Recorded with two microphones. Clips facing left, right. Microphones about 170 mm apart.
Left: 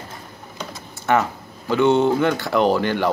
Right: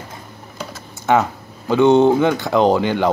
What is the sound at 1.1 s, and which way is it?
Speech, 15° right (ahead or behind).